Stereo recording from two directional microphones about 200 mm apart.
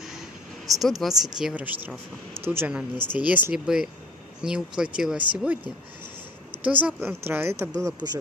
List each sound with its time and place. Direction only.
0.7 s speech: centre (ahead or behind)
6.6 s speech: 10° right (ahead or behind)